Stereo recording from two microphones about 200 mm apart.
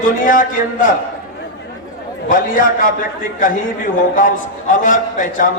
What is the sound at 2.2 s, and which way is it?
A man's voice, 40° left (ahead or behind).